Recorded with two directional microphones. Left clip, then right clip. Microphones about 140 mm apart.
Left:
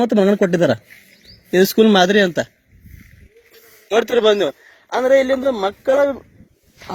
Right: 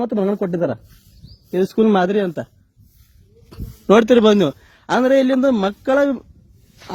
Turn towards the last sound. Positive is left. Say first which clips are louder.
# left 1 dB
turn(degrees=25)  # may be behind; listen again after turning